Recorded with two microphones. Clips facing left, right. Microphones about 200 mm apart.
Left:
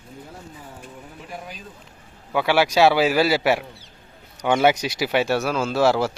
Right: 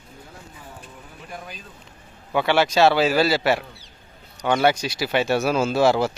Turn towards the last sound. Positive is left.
turn(degrees=5)  # may be behind; listen again after turning